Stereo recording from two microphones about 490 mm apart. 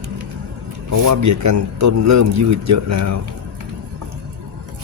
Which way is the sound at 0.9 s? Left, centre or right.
Right.